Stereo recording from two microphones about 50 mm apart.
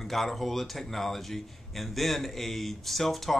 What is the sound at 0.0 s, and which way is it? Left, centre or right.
Speech, centre.